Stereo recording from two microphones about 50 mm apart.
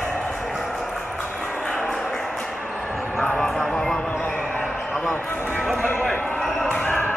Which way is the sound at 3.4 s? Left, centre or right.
Centre.